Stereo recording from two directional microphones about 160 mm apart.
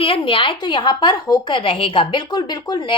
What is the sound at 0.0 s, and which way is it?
Speech, 35° left (ahead or behind).